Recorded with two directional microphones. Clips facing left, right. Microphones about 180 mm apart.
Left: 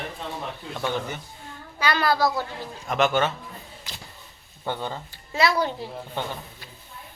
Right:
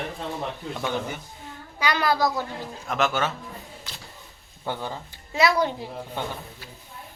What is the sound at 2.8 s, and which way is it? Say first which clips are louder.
Speech: left 3 dB; centre (ahead or behind).